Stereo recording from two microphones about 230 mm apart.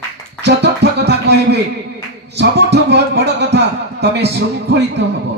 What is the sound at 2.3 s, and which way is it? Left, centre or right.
Speech, right.